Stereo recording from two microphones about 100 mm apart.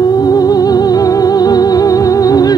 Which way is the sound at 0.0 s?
40° left (ahead or behind).